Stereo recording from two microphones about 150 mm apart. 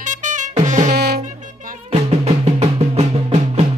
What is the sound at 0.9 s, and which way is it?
Music, 90° right.